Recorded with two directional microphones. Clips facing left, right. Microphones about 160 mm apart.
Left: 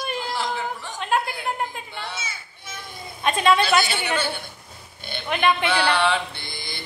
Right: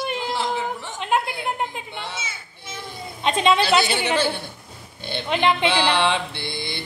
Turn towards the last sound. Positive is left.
turn(degrees=-25)  # may be behind; listen again after turning